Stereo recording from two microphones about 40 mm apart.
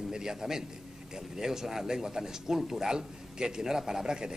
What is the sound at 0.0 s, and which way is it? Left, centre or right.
A man's voice, centre.